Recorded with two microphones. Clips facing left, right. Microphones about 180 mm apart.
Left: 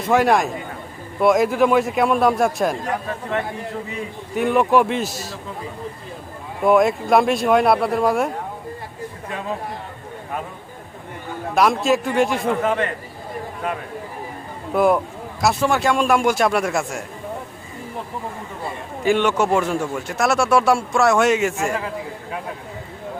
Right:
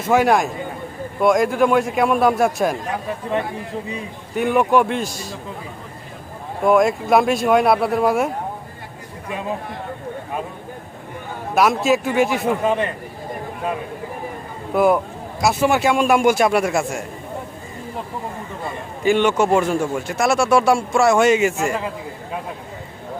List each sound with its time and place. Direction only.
0.0 s a man's voice: centre (ahead or behind)
4.4 s a man's voice: centre (ahead or behind)
6.6 s a man's voice: centre (ahead or behind)
11.5 s a man's voice: centre (ahead or behind)
12.6 s a man's voice: 15° right (ahead or behind)
14.7 s a man's voice: centre (ahead or behind)
19.0 s a man's voice: centre (ahead or behind)